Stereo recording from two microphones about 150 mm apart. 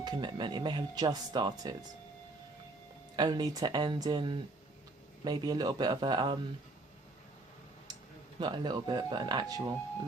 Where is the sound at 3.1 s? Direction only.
30° right (ahead or behind).